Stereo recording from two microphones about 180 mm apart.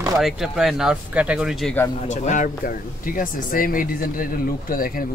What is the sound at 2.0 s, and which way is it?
Speech, 45° left (ahead or behind).